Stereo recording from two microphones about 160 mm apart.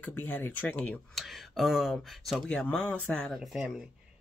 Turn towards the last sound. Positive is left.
turn(degrees=0)  # may be behind; listen again after turning